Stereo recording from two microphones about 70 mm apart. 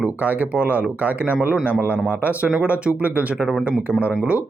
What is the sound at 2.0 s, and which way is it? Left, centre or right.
Speech, right.